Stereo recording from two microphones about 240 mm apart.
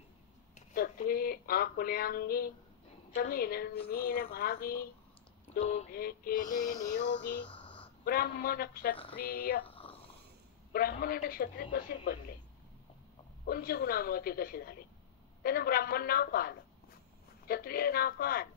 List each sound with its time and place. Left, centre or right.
0.6 s speech: left
5.6 s speech: left
5.9 s speech: left
8.0 s speech: left
10.7 s speech: left
13.5 s speech: left